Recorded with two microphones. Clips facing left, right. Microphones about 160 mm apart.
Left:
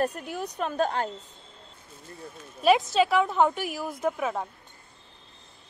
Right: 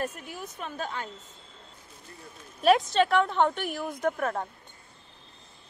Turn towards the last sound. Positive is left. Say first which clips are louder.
# even
turn(degrees=0)  # may be behind; listen again after turning